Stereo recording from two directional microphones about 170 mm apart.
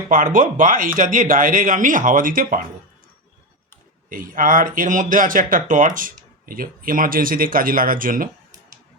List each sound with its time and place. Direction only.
0.1 s speech: 50° right (ahead or behind)
4.1 s speech: 55° right (ahead or behind)